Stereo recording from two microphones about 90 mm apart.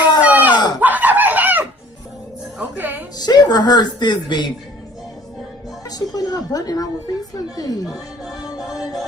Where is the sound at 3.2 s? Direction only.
50° left (ahead or behind).